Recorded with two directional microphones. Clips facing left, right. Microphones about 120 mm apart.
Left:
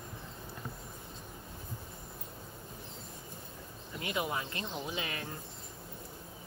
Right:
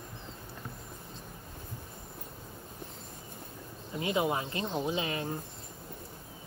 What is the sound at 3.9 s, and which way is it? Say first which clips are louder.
Speech: right 6 dB; 25° right (ahead or behind).